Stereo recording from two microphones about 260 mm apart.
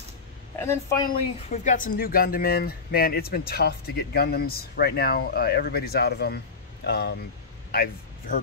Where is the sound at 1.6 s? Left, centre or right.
Left.